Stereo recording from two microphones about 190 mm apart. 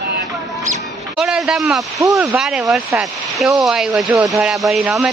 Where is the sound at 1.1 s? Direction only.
5° right (ahead or behind).